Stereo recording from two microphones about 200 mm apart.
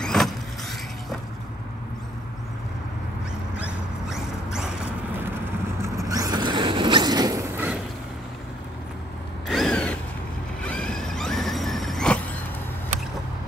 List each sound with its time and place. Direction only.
0.0 s vehicle: centre (ahead or behind)
3.5 s dog: 5° right (ahead or behind)
5.8 s vehicle: 15° right (ahead or behind)
9.5 s mechanisms: centre (ahead or behind)
10.6 s vehicle: 5° left (ahead or behind)